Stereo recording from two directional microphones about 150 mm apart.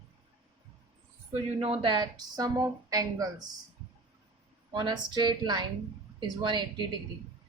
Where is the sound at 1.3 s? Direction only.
40° right (ahead or behind).